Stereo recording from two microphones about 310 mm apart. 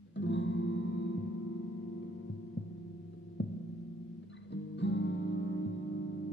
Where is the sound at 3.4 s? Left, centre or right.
Left.